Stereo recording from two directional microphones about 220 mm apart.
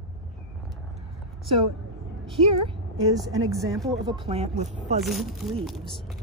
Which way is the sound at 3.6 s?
15° right (ahead or behind).